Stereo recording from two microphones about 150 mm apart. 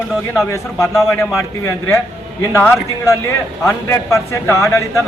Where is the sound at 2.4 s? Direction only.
20° left (ahead or behind).